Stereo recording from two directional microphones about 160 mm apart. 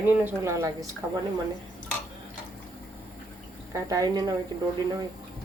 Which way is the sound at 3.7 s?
20° right (ahead or behind).